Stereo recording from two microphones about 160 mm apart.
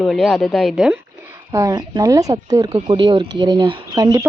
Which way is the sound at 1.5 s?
25° right (ahead or behind).